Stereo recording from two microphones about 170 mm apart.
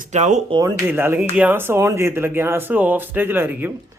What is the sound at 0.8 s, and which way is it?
Speech, 10° right (ahead or behind).